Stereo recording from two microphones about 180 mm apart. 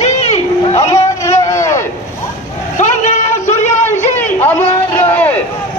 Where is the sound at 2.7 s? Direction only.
40° left (ahead or behind).